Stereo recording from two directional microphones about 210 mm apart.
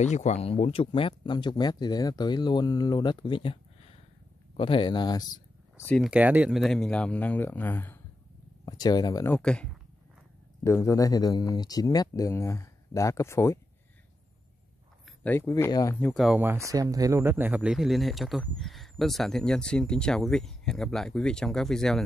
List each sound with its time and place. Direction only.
0.0 s speech: 35° left (ahead or behind)
5.8 s speech: 10° left (ahead or behind)
6.0 s speech: 5° right (ahead or behind); by 13.6 s 15° left (ahead or behind)
15.0 s speech: 10° left (ahead or behind)